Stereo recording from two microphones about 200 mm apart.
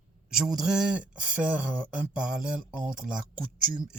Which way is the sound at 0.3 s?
Centre (ahead or behind).